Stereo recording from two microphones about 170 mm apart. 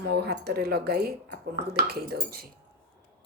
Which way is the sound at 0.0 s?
75° right (ahead or behind).